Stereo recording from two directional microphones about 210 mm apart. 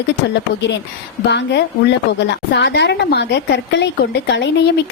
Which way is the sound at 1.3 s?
55° left (ahead or behind).